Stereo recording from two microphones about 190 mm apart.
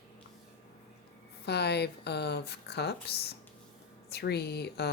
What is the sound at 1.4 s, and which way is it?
Speech, 60° left (ahead or behind).